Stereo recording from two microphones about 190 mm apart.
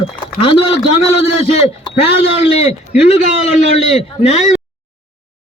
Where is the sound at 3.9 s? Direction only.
35° left (ahead or behind).